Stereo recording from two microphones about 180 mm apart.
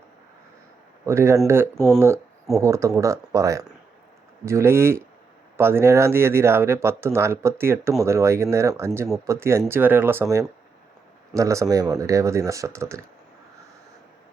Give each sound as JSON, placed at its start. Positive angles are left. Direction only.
{"t": 1.0, "sound": "speech", "side_deg": -15}